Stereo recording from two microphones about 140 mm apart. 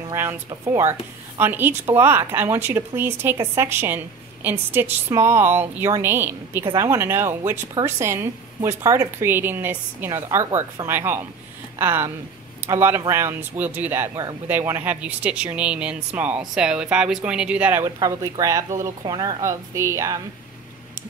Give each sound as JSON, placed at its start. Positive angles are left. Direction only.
{"t": 0.1, "sound": "speech", "side_deg": -15}
{"t": 17.8, "sound": "speech", "side_deg": -25}